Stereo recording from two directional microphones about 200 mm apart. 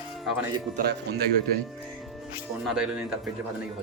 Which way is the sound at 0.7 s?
45° right (ahead or behind).